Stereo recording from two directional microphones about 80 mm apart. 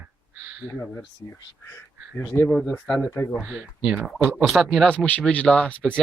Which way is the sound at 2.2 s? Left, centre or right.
Left.